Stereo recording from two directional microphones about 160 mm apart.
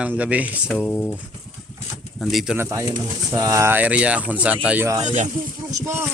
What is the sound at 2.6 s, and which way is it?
Speech, 15° right (ahead or behind).